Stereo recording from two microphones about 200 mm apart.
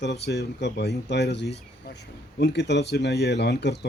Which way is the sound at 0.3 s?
55° left (ahead or behind).